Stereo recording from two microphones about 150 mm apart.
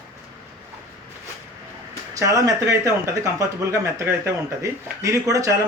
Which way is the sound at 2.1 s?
20° right (ahead or behind).